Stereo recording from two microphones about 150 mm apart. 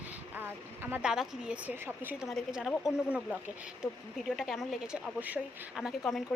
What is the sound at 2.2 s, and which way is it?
Speech, centre (ahead or behind).